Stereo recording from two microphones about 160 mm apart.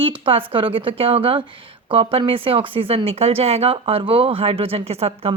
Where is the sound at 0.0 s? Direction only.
35° right (ahead or behind).